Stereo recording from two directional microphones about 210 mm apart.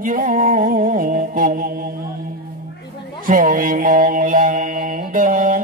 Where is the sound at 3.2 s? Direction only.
40° right (ahead or behind).